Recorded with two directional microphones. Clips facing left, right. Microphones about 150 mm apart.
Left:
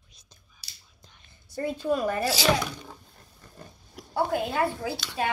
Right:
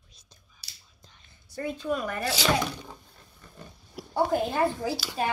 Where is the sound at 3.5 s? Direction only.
Centre (ahead or behind).